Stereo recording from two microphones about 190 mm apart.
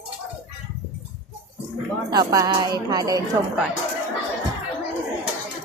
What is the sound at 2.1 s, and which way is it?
Speech, 20° right (ahead or behind).